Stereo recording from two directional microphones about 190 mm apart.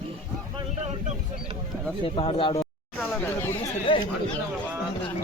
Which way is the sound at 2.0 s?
30° left (ahead or behind).